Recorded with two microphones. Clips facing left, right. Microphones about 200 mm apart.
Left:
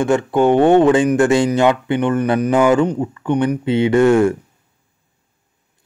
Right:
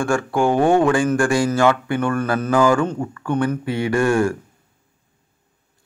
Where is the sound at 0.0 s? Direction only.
20° left (ahead or behind).